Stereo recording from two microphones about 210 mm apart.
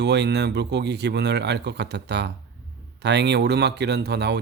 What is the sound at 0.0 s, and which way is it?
A man's voice, 55° right (ahead or behind).